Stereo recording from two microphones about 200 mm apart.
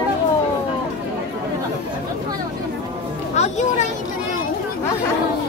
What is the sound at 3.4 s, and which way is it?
Speech, 35° left (ahead or behind).